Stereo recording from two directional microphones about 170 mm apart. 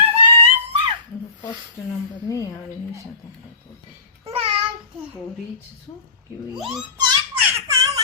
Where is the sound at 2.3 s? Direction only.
20° left (ahead or behind).